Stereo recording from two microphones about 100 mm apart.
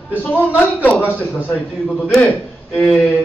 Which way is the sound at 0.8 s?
20° left (ahead or behind).